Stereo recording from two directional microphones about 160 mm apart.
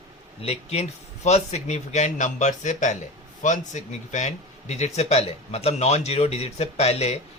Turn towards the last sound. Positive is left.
turn(degrees=40)  # may be behind; listen again after turning